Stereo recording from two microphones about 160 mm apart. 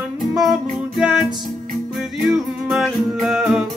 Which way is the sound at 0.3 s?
Centre (ahead or behind).